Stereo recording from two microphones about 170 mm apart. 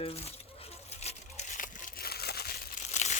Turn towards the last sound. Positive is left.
turn(degrees=45)  # may be behind; listen again after turning